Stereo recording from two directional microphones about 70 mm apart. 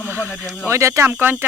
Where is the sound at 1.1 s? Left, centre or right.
Right.